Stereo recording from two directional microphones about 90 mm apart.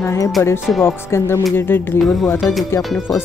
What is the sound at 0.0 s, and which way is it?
Speech, 30° left (ahead or behind).